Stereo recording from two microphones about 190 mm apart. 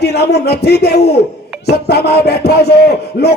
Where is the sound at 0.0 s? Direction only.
60° left (ahead or behind).